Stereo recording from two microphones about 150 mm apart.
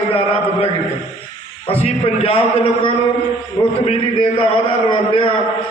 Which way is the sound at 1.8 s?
40° left (ahead or behind).